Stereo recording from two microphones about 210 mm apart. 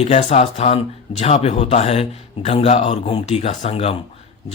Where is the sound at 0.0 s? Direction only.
30° left (ahead or behind).